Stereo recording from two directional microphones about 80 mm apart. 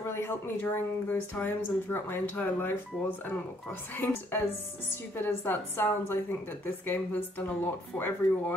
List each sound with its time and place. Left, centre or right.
0.0 s speech: left